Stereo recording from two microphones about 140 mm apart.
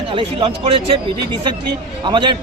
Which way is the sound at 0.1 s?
40° right (ahead or behind).